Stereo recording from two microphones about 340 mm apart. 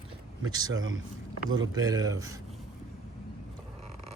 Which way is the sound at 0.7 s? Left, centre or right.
Right.